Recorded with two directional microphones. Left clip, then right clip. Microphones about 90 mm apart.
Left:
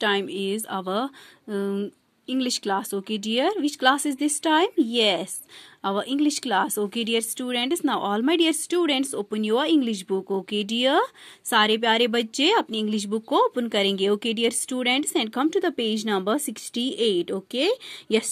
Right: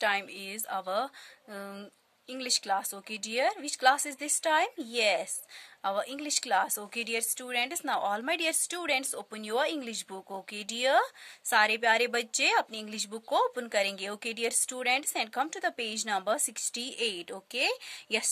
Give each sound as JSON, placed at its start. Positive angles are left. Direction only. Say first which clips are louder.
{"t": 0.0, "sound": "speech", "louder": "left 6 dB", "side_deg": 35}